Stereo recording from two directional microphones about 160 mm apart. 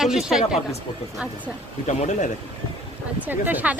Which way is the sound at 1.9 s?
45° left (ahead or behind).